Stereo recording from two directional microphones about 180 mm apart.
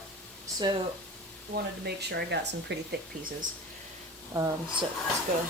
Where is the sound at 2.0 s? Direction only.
70° right (ahead or behind).